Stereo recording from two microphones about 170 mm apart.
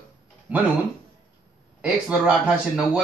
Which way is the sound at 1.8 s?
5° right (ahead or behind).